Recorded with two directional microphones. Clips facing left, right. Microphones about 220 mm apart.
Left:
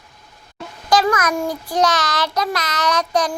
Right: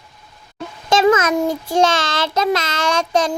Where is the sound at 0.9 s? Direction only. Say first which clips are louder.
Right 4 dB; 25° right (ahead or behind).